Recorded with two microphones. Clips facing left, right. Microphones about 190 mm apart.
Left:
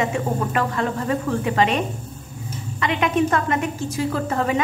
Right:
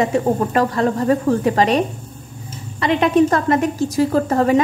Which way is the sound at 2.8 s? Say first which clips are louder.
Right 6 dB; 35° right (ahead or behind).